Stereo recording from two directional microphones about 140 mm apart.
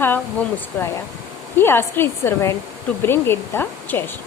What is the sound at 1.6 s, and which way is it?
A woman's voice, 15° left (ahead or behind).